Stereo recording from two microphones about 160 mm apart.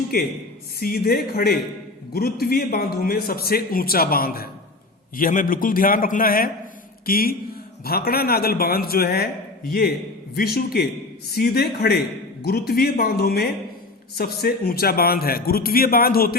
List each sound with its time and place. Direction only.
0.8 s a man's voice: 70° left (ahead or behind)
10.3 s a man's voice: 75° left (ahead or behind)